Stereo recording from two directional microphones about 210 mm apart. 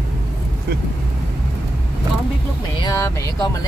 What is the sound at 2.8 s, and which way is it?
Speech, 15° left (ahead or behind).